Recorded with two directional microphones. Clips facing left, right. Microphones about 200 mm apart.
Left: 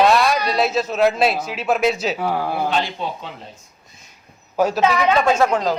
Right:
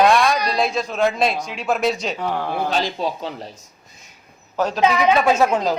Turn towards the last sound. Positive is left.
turn(degrees=-10)  # may be behind; listen again after turning